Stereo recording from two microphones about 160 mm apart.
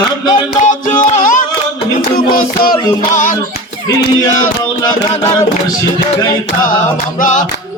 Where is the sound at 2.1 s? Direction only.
65° left (ahead or behind).